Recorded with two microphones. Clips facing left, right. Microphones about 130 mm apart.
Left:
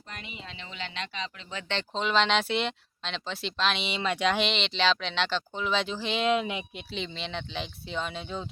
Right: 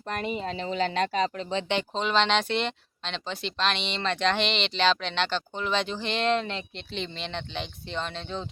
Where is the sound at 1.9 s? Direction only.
Centre (ahead or behind).